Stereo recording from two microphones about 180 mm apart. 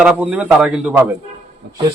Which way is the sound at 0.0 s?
5° right (ahead or behind).